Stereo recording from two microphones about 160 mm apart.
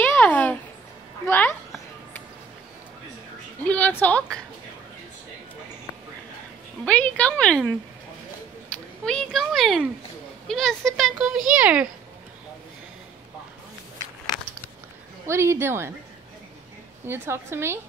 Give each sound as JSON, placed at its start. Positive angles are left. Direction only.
{"t": 0.0, "sound": "a sound", "side_deg": 10}
{"t": 1.2, "sound": "a woman's voice", "side_deg": 15}
{"t": 3.6, "sound": "a woman's voice", "side_deg": 10}
{"t": 6.8, "sound": "a woman's voice", "side_deg": 5}
{"t": 9.0, "sound": "a child's voice", "side_deg": 5}
{"t": 15.2, "sound": "a woman's voice", "side_deg": -15}
{"t": 17.0, "sound": "a woman's voice", "side_deg": -15}